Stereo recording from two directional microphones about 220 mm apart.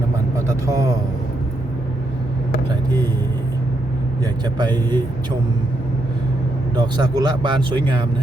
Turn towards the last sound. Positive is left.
turn(degrees=-20)  # may be behind; listen again after turning